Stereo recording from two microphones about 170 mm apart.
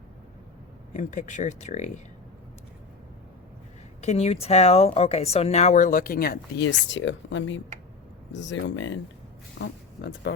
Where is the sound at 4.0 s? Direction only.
40° left (ahead or behind); by 6.6 s 65° left (ahead or behind).